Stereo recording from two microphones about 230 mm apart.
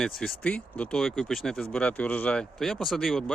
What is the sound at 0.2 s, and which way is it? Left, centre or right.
Speech, centre.